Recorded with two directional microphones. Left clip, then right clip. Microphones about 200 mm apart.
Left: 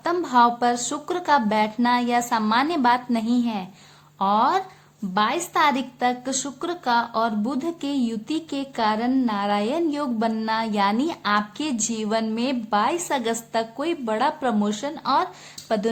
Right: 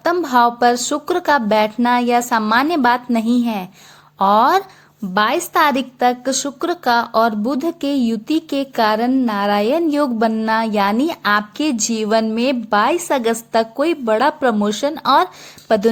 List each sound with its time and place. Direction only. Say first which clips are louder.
0.0 s a woman's voice: right 4 dB; 30° right (ahead or behind)